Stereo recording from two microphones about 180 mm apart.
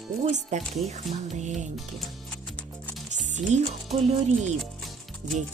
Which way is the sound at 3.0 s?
40° right (ahead or behind).